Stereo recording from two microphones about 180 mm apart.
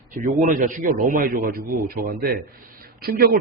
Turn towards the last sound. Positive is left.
turn(degrees=-55)  # may be behind; listen again after turning